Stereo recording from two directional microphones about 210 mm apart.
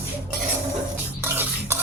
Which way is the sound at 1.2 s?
10° right (ahead or behind).